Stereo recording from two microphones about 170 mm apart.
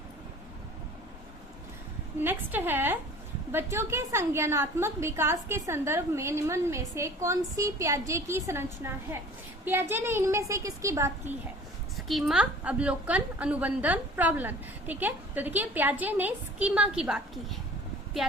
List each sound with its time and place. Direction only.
2.2 s a woman's voice: 10° right (ahead or behind)
9.9 s a woman's voice: 15° right (ahead or behind)
11.9 s a woman's voice: centre (ahead or behind)